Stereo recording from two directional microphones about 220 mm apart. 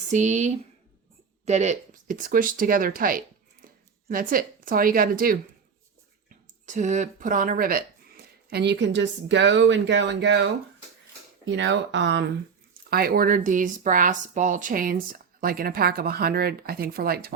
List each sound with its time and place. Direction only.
0.1 s speech: 30° right (ahead or behind); by 12.2 s 55° right (ahead or behind)
12.9 s speech: 45° right (ahead or behind)